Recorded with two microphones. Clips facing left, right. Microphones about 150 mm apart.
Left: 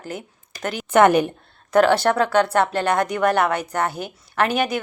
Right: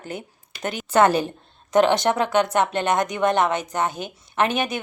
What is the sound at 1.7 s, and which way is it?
A woman's voice, 20° right (ahead or behind).